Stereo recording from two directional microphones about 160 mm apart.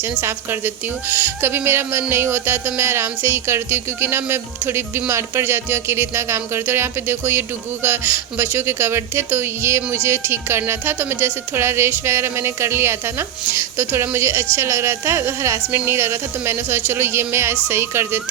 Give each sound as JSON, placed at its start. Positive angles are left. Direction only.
{"t": 0.0, "sound": "a woman's voice", "side_deg": -15}